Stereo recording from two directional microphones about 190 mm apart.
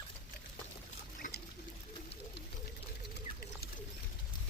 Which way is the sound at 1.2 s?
45° left (ahead or behind).